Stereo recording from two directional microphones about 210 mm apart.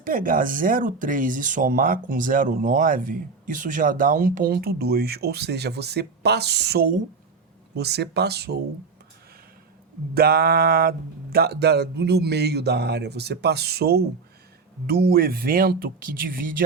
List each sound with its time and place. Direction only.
0.0 s speech: 40° right (ahead or behind)
10.2 s speech: 45° right (ahead or behind)